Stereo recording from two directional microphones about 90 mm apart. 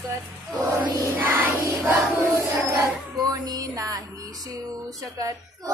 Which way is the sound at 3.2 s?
45° right (ahead or behind).